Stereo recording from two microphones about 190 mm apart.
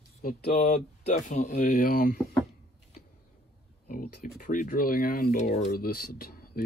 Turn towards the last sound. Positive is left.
turn(degrees=50)  # may be behind; listen again after turning